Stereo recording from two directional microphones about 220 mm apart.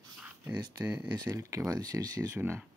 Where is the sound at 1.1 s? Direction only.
15° right (ahead or behind).